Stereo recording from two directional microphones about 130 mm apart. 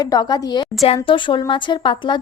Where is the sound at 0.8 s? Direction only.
45° left (ahead or behind).